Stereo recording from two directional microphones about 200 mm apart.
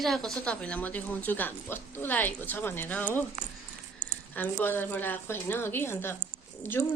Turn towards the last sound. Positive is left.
turn(degrees=10)  # may be behind; listen again after turning